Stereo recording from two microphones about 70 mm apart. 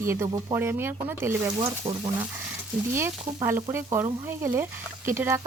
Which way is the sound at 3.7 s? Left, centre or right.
Right.